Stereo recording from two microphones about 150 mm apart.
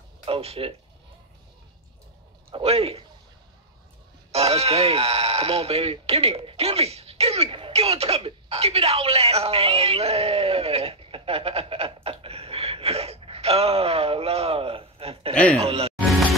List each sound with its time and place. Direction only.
0.2 s speech: 40° right (ahead or behind)
2.5 s a man's voice: 40° right (ahead or behind)
4.3 s a man's voice: 40° right (ahead or behind)